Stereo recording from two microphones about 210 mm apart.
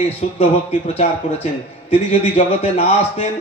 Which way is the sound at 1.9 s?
30° left (ahead or behind).